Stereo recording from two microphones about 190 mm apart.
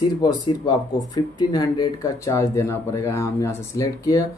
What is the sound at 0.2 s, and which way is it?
Speech, 20° left (ahead or behind).